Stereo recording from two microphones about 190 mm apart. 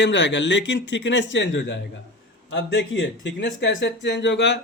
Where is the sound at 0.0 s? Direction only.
65° left (ahead or behind).